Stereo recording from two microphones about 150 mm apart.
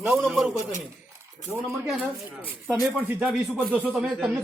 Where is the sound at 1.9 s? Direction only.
5° right (ahead or behind).